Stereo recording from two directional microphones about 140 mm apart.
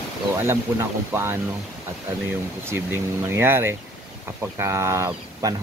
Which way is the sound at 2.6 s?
15° right (ahead or behind).